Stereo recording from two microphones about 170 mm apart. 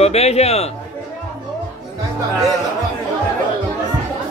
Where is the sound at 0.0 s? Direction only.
40° left (ahead or behind).